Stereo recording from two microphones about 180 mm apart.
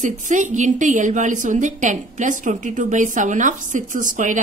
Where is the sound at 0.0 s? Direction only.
45° right (ahead or behind).